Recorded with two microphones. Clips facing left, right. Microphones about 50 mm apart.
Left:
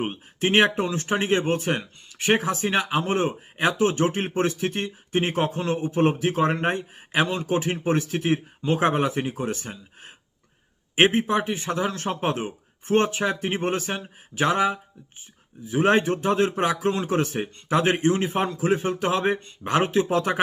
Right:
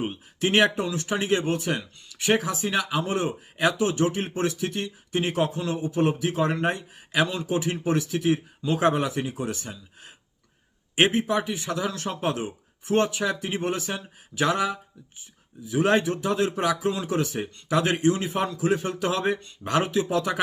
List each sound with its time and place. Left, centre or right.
0.0 s speech: left